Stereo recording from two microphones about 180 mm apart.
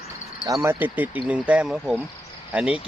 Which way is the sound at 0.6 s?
10° right (ahead or behind).